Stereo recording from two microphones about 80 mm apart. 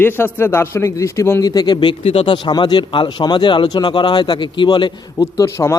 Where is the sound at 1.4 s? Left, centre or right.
Left.